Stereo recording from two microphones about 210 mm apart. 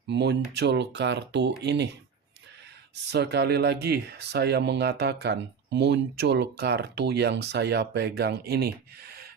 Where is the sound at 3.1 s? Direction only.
50° right (ahead or behind).